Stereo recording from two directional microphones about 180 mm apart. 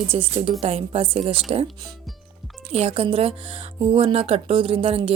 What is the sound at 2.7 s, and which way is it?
Speech, 35° right (ahead or behind).